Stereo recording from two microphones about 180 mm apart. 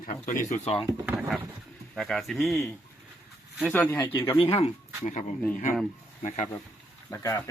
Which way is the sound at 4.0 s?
30° left (ahead or behind).